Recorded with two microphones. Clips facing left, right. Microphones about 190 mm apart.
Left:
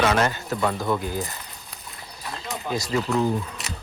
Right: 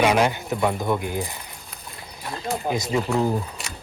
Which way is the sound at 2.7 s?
20° right (ahead or behind).